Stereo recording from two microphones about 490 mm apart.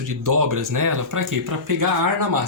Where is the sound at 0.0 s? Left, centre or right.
Right.